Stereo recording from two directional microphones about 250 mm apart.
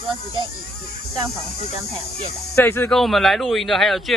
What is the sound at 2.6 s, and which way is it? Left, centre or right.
A man's voice, centre.